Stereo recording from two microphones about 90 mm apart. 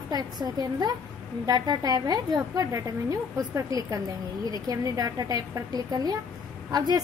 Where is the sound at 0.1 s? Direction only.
50° right (ahead or behind).